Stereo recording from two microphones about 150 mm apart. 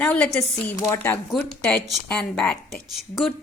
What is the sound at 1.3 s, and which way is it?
A woman's voice, 5° left (ahead or behind).